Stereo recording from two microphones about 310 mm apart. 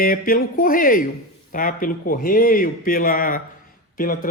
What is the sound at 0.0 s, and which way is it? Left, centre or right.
A man's voice, left.